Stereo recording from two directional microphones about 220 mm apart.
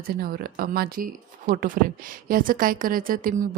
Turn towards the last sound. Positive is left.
turn(degrees=-40)  # may be behind; listen again after turning